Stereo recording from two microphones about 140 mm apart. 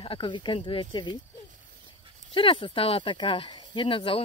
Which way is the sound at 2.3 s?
35° left (ahead or behind).